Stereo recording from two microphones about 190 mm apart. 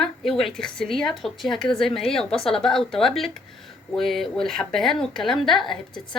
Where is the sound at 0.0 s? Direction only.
Centre (ahead or behind).